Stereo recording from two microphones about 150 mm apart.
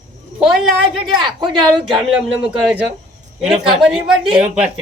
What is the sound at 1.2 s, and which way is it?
Speech, 30° right (ahead or behind).